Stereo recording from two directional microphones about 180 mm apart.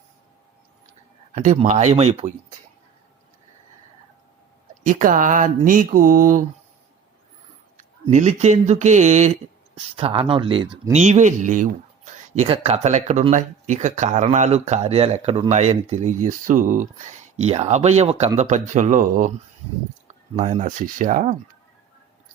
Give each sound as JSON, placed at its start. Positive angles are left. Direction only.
{"t": 1.3, "sound": "speech", "side_deg": -45}
{"t": 4.8, "sound": "speech", "side_deg": -45}
{"t": 8.1, "sound": "speech", "side_deg": -40}
{"t": 10.9, "sound": "speech", "side_deg": -40}
{"t": 20.3, "sound": "speech", "side_deg": -45}